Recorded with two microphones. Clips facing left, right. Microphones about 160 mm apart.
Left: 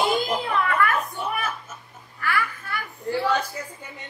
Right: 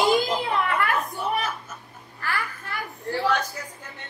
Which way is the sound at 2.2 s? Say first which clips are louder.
Left 3 dB; 35° right (ahead or behind).